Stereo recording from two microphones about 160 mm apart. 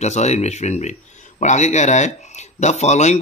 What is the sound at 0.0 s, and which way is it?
Speech, 45° left (ahead or behind).